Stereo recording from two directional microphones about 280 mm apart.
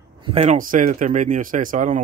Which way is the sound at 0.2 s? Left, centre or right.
Right.